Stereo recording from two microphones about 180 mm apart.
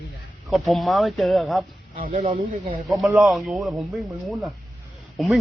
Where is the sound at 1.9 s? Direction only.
45° right (ahead or behind).